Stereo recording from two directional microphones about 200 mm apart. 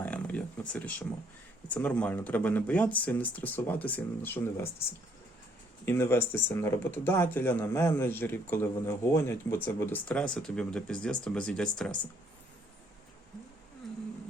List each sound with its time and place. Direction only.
0.0 s a sound: 10° left (ahead or behind)
0.7 s speech: 5° left (ahead or behind)
5.8 s speech: 10° left (ahead or behind)